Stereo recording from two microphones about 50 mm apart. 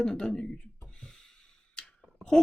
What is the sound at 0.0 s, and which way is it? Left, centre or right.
Speech, centre.